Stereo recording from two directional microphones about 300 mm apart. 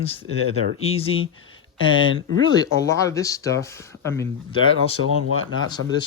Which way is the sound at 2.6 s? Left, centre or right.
Centre.